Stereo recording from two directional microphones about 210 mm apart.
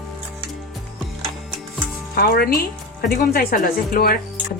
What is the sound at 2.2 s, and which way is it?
Speech, 45° left (ahead or behind).